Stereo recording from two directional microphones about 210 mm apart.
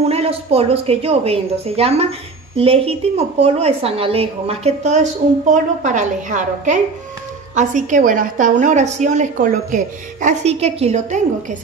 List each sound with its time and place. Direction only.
0.0 s a woman's voice: 30° right (ahead or behind)